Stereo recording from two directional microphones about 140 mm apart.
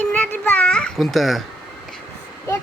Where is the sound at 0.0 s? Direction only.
10° left (ahead or behind).